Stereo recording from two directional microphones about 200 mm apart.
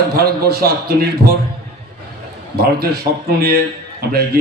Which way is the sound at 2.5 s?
50° right (ahead or behind).